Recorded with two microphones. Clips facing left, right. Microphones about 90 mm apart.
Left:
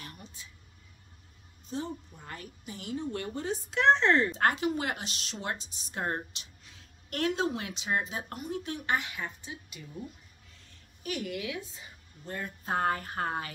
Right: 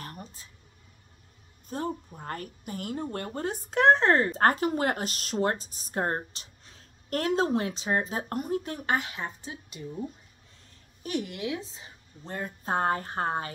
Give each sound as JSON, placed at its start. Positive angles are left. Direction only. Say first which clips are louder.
{"t": 0.0, "sound": "a sound", "louder": "right 5 dB", "side_deg": -40}
{"t": 1.7, "sound": "a woman's voice", "louder": "right 4 dB", "side_deg": -50}
{"t": 11.0, "sound": "a woman's voice", "louder": "right 3 dB", "side_deg": -30}